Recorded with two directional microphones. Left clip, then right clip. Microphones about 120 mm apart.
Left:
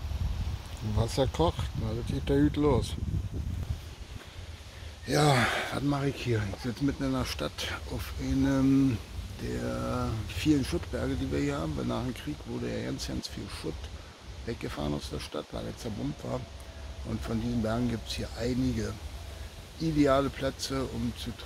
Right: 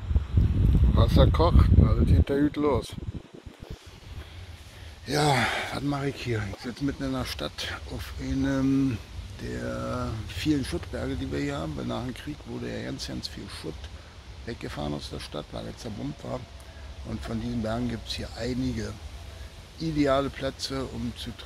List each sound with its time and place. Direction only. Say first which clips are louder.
0.9 s speech: right 4 dB; 5° left (ahead or behind)
5.0 s speech: right 1 dB; 20° left (ahead or behind)